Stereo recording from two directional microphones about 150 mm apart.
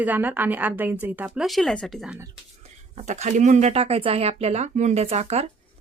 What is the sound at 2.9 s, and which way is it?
Speech, 50° right (ahead or behind).